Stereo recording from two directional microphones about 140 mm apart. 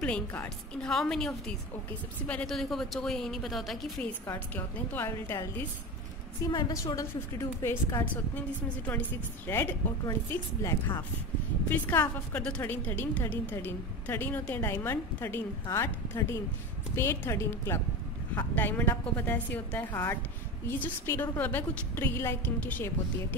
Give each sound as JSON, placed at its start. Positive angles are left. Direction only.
{"t": 0.0, "sound": "a woman's voice", "side_deg": 10}
{"t": 4.6, "sound": "a woman's voice", "side_deg": 15}
{"t": 8.0, "sound": "a woman's voice", "side_deg": 10}